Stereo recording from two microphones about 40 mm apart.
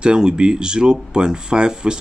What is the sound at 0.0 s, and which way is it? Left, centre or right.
Speech, right.